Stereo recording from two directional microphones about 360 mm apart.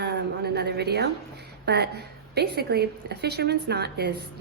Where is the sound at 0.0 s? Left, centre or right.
Right.